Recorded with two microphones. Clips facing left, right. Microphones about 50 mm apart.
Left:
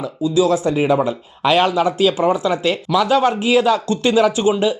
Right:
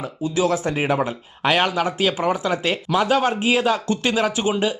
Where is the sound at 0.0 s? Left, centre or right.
Right.